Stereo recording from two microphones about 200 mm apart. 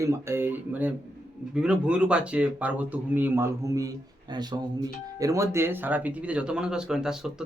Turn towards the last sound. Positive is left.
turn(degrees=-5)  # may be behind; listen again after turning